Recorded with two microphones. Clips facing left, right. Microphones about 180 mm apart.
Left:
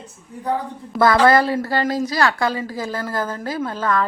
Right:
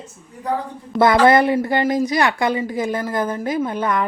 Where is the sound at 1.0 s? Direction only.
20° right (ahead or behind).